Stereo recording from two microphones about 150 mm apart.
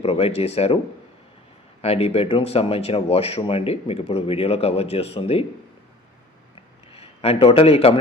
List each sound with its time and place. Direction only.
0.0 s speech: 40° left (ahead or behind)
1.8 s speech: 45° left (ahead or behind)
6.9 s a man's voice: 40° left (ahead or behind)